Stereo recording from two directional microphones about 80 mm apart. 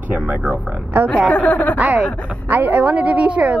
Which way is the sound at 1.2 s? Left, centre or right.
Centre.